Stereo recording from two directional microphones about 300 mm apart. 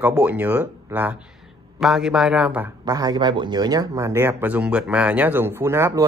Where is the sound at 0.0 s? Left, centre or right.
Centre.